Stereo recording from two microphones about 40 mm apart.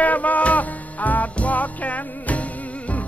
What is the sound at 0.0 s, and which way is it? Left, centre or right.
Music, left.